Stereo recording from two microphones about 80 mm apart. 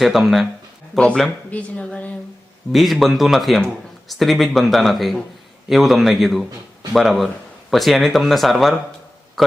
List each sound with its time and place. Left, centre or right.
0.0 s speech: centre
0.9 s speech: centre
2.7 s speech: centre